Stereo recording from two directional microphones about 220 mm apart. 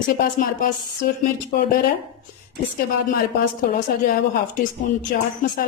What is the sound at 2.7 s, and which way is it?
Speech, 40° left (ahead or behind).